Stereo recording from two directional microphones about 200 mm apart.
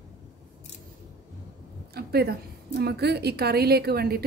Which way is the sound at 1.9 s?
50° right (ahead or behind).